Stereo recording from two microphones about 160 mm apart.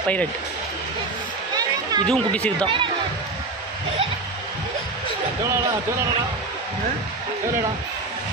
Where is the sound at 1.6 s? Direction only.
25° right (ahead or behind).